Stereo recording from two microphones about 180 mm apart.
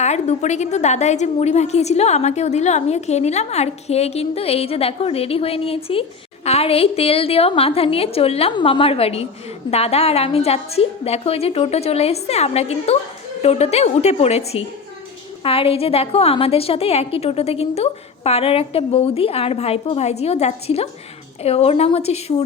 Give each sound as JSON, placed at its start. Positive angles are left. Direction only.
{"t": 0.0, "sound": "a woman's voice", "side_deg": 40}